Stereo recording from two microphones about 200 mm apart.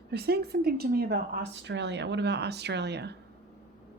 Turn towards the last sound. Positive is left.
turn(degrees=-55)  # may be behind; listen again after turning